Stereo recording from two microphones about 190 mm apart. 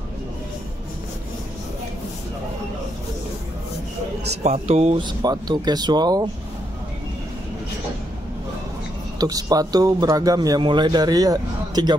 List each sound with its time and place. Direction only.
4.4 s speech: 35° right (ahead or behind)
5.0 s speech: 20° right (ahead or behind)
9.2 s speech: 20° right (ahead or behind)